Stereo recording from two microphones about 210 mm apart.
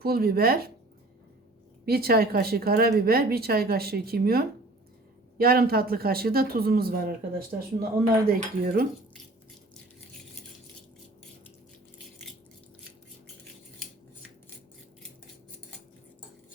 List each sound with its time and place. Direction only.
0.0 s speech: 45° right (ahead or behind)
1.8 s speech: 45° right (ahead or behind)